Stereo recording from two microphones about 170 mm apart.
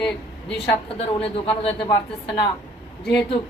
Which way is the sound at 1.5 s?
30° left (ahead or behind).